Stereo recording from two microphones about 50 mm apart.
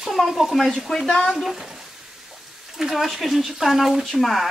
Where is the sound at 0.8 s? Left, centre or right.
Centre.